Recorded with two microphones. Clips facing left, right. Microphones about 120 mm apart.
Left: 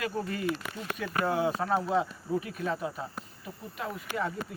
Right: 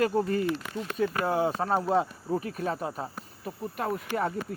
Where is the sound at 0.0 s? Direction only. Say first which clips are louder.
Right 6 dB; 40° right (ahead or behind).